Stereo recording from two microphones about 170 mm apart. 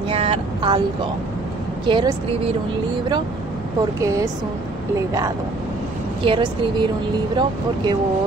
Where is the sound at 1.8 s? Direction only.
30° right (ahead or behind).